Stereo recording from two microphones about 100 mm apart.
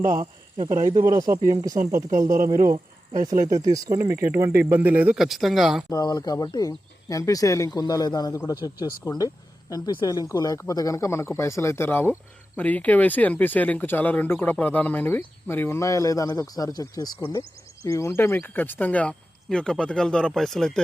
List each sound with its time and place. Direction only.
0.9 s a man's voice: 40° right (ahead or behind); by 5.1 s 15° right (ahead or behind)
5.1 s speech: 5° right (ahead or behind)
5.9 s speech: 40° left (ahead or behind); by 20.8 s 5° left (ahead or behind)